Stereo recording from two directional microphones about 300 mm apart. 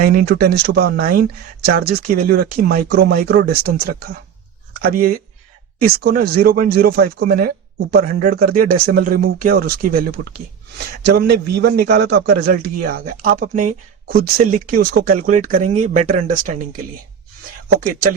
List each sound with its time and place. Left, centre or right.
0.0 s speech: right